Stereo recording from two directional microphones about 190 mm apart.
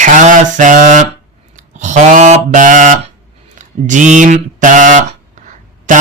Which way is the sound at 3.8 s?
40° right (ahead or behind).